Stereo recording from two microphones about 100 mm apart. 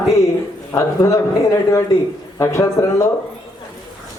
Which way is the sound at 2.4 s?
30° left (ahead or behind).